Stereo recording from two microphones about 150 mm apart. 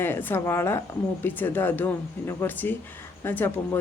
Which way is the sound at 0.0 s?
15° left (ahead or behind).